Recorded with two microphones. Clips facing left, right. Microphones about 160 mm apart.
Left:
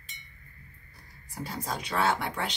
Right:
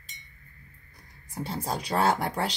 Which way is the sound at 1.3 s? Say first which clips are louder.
Right 3 dB; 30° right (ahead or behind).